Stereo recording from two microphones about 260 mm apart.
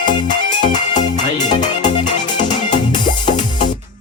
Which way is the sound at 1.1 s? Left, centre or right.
Left.